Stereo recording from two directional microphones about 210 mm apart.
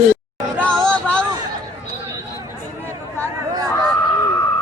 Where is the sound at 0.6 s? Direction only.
5° left (ahead or behind).